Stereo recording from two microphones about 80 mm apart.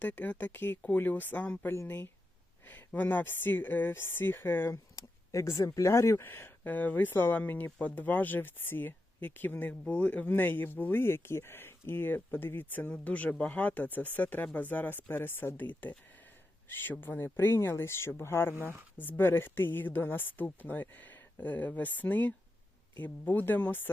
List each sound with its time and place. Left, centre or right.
0.0 s speech: centre
4.9 s speech: left
6.2 s speech: left